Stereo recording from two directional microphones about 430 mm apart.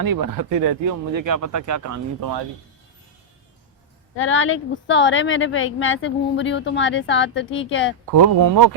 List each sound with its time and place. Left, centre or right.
0.0 s speech: right
4.2 s speech: left
8.1 s speech: right